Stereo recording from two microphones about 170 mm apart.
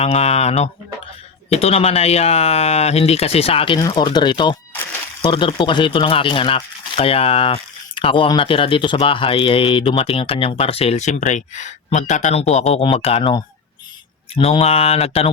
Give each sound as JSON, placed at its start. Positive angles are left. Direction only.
{"t": 0.0, "sound": "speech", "side_deg": 40}
{"t": 3.8, "sound": "speech", "side_deg": 25}